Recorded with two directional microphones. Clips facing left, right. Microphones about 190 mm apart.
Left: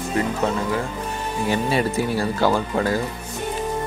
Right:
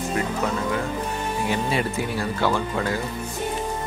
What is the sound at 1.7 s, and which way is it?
Speech, 40° left (ahead or behind).